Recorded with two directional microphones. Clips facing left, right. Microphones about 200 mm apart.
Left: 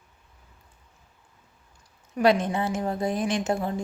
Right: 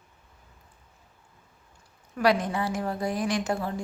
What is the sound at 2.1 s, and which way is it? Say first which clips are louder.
A woman's voice: left 3 dB; 25° left (ahead or behind).